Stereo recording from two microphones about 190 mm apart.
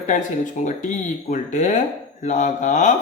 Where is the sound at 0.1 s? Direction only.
40° left (ahead or behind).